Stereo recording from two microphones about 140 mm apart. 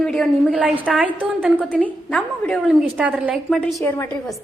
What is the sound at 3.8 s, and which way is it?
Speech, 20° left (ahead or behind).